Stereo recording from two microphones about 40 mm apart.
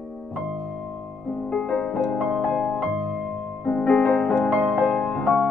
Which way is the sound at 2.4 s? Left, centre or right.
Centre.